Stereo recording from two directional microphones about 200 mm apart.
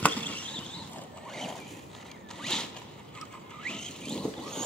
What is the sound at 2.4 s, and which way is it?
Zipper, 5° left (ahead or behind).